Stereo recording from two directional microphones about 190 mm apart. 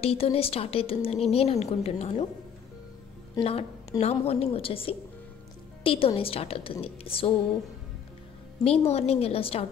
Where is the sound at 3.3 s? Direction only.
30° left (ahead or behind).